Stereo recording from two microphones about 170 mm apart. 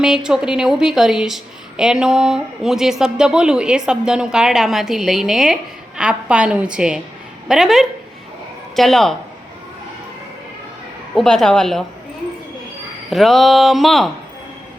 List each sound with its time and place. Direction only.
0.0 s a woman's voice: 5° right (ahead or behind)
11.1 s a woman's voice: centre (ahead or behind)
13.1 s a woman's voice: centre (ahead or behind)